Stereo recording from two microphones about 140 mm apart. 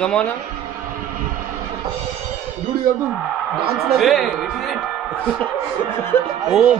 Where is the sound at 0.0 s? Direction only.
5° left (ahead or behind).